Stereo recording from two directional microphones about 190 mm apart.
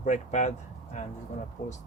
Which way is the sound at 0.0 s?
40° left (ahead or behind).